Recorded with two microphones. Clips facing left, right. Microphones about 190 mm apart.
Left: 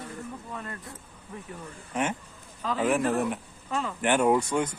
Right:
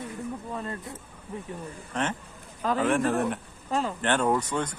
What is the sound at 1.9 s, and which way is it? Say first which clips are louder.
A man's voice: left 1 dB; 10° left (ahead or behind).